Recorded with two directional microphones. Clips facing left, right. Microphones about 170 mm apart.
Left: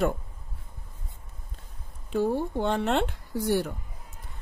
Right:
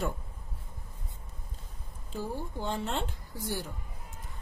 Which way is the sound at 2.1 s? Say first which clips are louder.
Left 11 dB; 65° left (ahead or behind).